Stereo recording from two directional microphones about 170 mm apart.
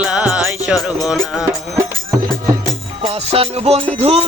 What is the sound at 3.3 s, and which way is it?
Music, 35° right (ahead or behind).